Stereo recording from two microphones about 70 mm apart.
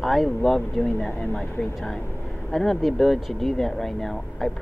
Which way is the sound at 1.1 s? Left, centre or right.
Centre.